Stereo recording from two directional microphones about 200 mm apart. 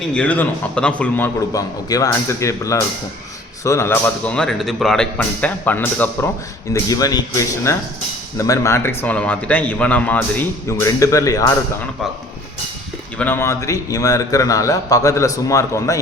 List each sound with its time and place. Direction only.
0.1 s a man's voice: 5° left (ahead or behind)
13.1 s a man's voice: 10° left (ahead or behind)